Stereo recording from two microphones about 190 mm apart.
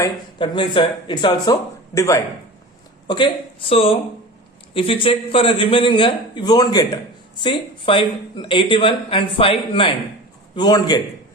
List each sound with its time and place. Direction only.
0.0 s a man's voice: 25° left (ahead or behind)
3.1 s a man's voice: 25° left (ahead or behind)